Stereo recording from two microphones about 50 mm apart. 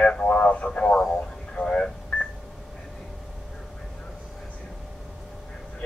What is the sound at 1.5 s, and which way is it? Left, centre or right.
Radio, centre.